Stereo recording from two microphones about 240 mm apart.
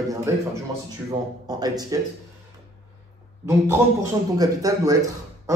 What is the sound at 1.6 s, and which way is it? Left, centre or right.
Speech, centre.